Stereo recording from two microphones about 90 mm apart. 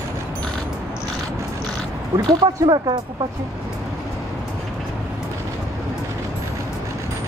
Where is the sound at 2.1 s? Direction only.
55° right (ahead or behind).